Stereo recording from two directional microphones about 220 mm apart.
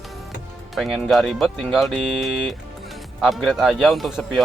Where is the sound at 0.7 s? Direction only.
Centre (ahead or behind).